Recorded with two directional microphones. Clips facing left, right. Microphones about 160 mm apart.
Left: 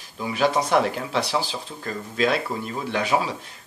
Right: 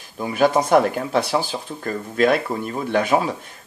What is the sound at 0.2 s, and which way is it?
Speech, 50° right (ahead or behind).